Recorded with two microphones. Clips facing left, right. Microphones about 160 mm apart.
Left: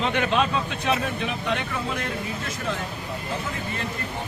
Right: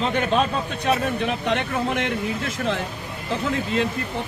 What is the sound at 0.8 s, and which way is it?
Speech, 55° right (ahead or behind).